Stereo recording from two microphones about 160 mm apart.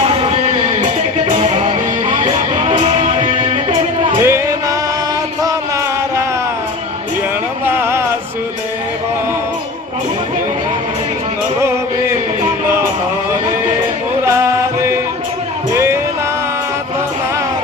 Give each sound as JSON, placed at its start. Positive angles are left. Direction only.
{"t": 0.0, "sound": "music", "side_deg": -35}
{"t": 4.2, "sound": "music", "side_deg": -15}
{"t": 7.6, "sound": "a sound", "side_deg": -15}